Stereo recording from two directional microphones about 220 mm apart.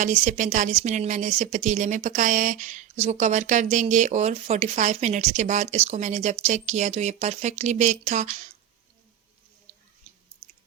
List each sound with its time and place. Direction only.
0.0 s speech: 35° right (ahead or behind)
10.4 s chewing: 15° right (ahead or behind)